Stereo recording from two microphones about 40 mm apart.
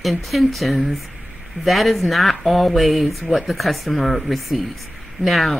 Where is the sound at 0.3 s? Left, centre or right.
Centre.